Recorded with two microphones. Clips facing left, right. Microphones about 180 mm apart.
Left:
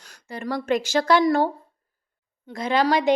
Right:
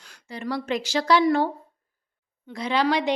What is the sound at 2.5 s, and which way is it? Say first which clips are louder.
Speech: left 2 dB; 45° left (ahead or behind).